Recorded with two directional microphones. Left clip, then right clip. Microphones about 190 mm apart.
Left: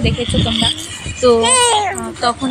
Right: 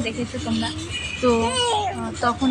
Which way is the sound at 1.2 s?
15° left (ahead or behind).